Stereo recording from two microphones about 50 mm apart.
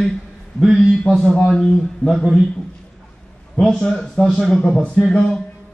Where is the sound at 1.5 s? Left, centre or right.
Centre.